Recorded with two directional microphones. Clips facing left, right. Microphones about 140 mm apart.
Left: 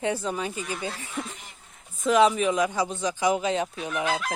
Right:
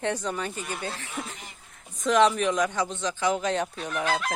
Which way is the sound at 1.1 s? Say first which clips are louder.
Left 1 dB; 5° right (ahead or behind).